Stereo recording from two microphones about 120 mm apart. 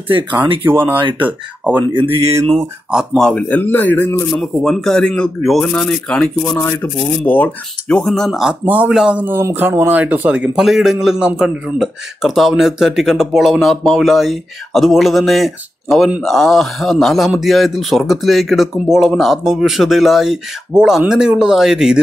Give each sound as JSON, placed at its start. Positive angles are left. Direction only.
{"t": 0.7, "sound": "speech", "side_deg": -15}
{"t": 2.9, "sound": "speech", "side_deg": -5}
{"t": 3.3, "sound": "speech", "side_deg": 10}
{"t": 4.4, "sound": "speech", "side_deg": 0}